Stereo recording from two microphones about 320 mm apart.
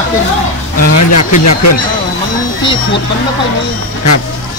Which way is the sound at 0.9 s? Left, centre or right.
Left.